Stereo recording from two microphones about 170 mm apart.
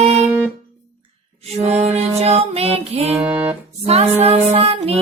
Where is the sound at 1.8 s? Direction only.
40° right (ahead or behind).